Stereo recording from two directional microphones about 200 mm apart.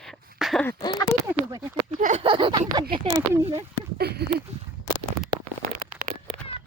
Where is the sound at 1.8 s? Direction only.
35° right (ahead or behind).